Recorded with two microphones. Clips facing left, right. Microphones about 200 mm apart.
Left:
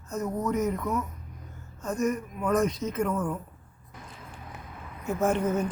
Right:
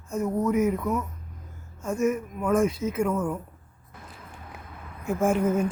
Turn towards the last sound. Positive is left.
turn(degrees=-10)  # may be behind; listen again after turning